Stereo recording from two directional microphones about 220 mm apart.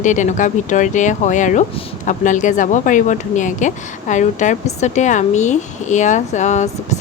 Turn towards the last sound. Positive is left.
turn(degrees=30)  # may be behind; listen again after turning